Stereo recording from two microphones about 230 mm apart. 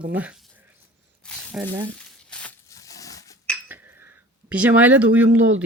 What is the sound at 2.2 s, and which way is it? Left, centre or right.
Crunch, centre.